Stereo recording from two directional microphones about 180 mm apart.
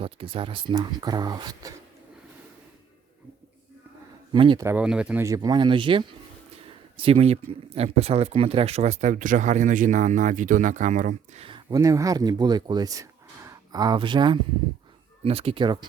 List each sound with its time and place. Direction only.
0.0 s speech: 30° right (ahead or behind)
4.3 s speech: 25° right (ahead or behind)
4.6 s speech: 10° right (ahead or behind); by 6.1 s 30° right (ahead or behind)
6.7 s a sound: 30° right (ahead or behind)
7.7 s speech: 35° right (ahead or behind)
11.4 s speech: 25° right (ahead or behind)